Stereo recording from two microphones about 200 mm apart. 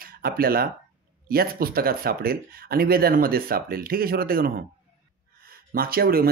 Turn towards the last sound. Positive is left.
turn(degrees=-50)  # may be behind; listen again after turning